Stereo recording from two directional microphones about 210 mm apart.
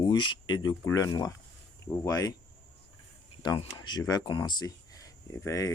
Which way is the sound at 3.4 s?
20° left (ahead or behind).